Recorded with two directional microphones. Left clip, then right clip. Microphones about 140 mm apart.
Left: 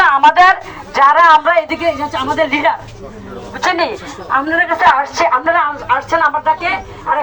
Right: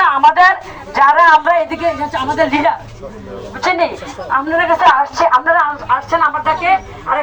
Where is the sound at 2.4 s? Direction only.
10° left (ahead or behind).